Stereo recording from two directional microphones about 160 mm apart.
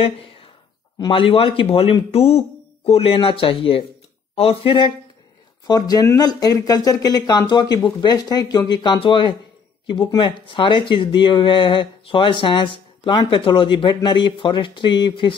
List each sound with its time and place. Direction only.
0.0 s speech: 35° left (ahead or behind)